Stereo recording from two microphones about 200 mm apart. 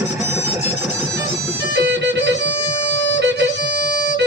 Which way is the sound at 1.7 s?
60° right (ahead or behind).